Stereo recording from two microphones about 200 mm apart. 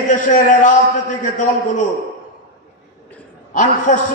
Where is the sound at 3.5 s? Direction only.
40° left (ahead or behind).